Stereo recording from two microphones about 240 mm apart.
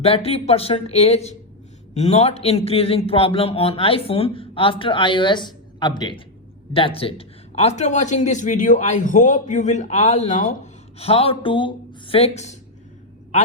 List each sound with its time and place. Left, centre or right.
0.0 s a man's voice: left